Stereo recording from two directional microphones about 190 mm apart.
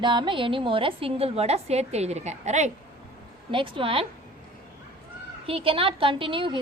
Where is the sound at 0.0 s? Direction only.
25° right (ahead or behind).